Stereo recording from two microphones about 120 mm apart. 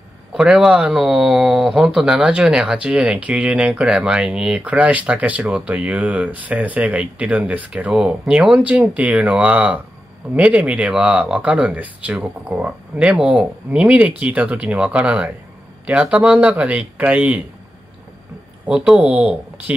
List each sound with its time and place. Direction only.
0.3 s speech: 5° right (ahead or behind)
18.7 s speech: 10° right (ahead or behind)